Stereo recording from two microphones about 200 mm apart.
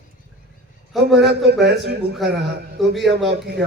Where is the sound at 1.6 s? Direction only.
60° right (ahead or behind).